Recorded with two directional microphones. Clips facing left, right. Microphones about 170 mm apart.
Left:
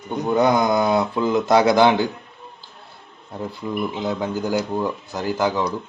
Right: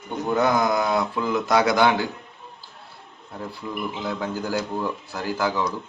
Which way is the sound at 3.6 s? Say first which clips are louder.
Left 5 dB; 25° left (ahead or behind).